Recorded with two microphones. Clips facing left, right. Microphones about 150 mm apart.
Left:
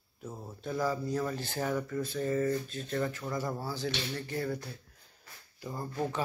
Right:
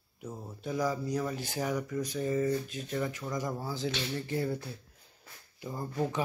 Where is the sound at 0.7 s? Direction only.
15° right (ahead or behind).